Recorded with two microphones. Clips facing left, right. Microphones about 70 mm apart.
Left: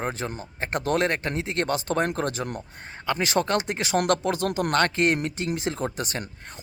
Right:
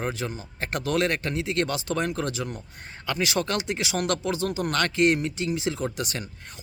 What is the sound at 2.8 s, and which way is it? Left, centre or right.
Speech, left.